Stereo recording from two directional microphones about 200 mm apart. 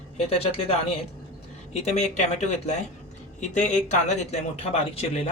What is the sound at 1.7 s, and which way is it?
Speech, 35° left (ahead or behind).